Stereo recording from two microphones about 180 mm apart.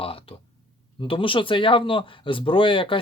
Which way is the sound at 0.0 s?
30° left (ahead or behind).